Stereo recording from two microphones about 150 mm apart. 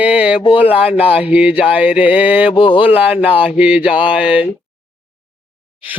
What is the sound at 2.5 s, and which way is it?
Speech, 35° left (ahead or behind).